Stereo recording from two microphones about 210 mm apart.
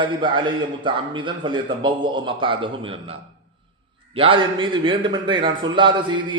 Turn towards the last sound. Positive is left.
turn(degrees=-20)  # may be behind; listen again after turning